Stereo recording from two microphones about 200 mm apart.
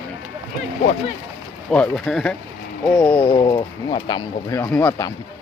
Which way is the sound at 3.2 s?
25° left (ahead or behind).